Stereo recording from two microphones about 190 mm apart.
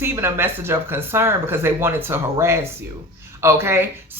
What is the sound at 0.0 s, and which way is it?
Speech, 10° right (ahead or behind).